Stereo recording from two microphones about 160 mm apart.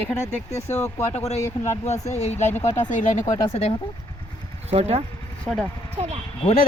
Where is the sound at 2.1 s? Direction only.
45° left (ahead or behind).